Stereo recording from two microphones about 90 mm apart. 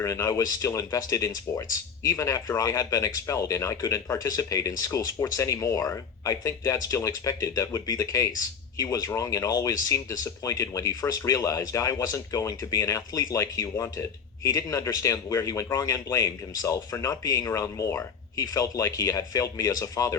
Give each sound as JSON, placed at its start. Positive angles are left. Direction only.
{"t": 0.0, "sound": "speech", "side_deg": 35}